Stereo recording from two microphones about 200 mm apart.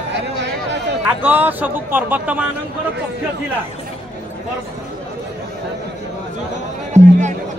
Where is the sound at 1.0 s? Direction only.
10° right (ahead or behind).